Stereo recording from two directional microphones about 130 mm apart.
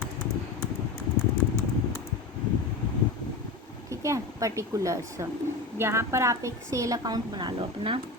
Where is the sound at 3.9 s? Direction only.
25° right (ahead or behind); by 8.0 s 40° right (ahead or behind).